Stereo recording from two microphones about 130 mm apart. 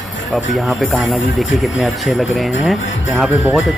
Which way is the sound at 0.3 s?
5° right (ahead or behind).